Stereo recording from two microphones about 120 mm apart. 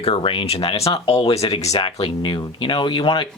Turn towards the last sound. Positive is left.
turn(degrees=45)  # may be behind; listen again after turning